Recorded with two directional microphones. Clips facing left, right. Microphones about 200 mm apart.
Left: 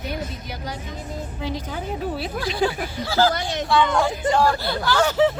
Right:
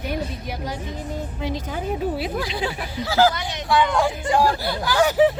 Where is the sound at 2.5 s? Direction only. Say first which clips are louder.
Left 4 dB; 45° left (ahead or behind).